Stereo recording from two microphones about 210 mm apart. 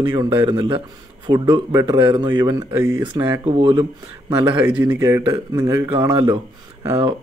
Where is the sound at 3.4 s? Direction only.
25° right (ahead or behind).